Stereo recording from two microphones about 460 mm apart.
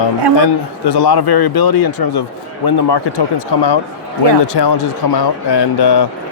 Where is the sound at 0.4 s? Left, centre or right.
Left.